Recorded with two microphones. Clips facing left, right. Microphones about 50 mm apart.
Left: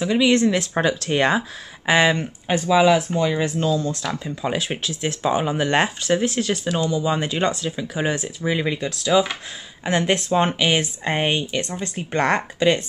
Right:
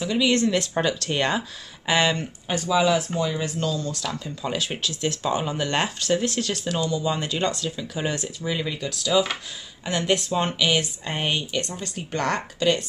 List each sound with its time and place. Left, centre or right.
0.0 s speech: centre